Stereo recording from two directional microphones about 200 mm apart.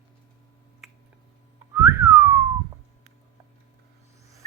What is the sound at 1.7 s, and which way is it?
Whistling, 15° right (ahead or behind).